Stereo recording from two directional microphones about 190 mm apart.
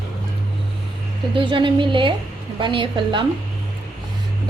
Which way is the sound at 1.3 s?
25° right (ahead or behind).